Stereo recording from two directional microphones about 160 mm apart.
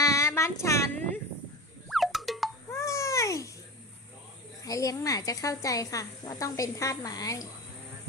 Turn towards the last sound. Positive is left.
turn(degrees=20)  # may be behind; listen again after turning